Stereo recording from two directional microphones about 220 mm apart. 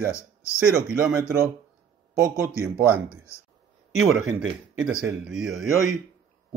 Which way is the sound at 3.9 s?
70° right (ahead or behind).